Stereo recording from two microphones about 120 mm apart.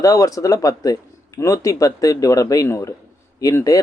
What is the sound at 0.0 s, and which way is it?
Speech, 30° left (ahead or behind).